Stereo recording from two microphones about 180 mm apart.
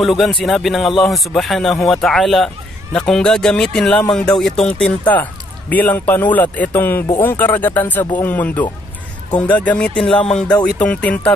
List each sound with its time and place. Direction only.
0.0 s speech: centre (ahead or behind)